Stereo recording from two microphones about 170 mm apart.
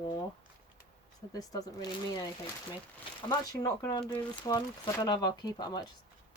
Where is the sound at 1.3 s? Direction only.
20° left (ahead or behind).